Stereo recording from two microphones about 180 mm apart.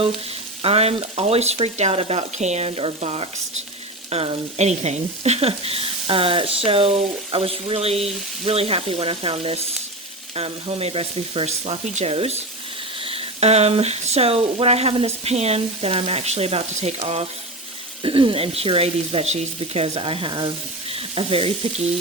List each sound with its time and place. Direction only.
0.6 s speech: 35° right (ahead or behind)